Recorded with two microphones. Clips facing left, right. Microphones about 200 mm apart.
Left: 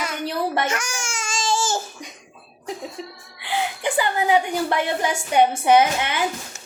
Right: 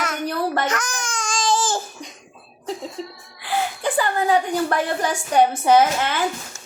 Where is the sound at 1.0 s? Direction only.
25° left (ahead or behind).